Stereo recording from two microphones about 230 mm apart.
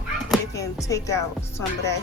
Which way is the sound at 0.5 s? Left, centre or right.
Centre.